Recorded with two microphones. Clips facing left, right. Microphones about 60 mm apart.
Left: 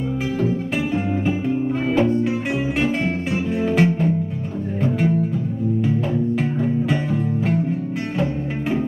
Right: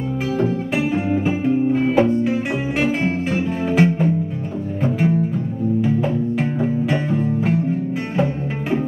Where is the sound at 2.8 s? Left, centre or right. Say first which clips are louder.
Right 2 dB; centre.